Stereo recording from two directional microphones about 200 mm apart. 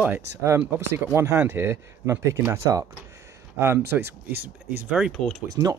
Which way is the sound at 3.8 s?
55° right (ahead or behind).